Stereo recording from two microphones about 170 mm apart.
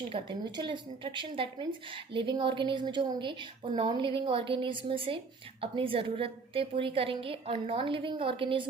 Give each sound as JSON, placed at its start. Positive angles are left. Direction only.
{"t": 0.1, "sound": "a woman's voice", "side_deg": -30}